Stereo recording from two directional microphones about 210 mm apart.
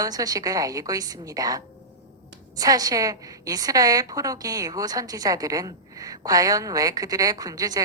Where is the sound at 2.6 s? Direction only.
15° right (ahead or behind).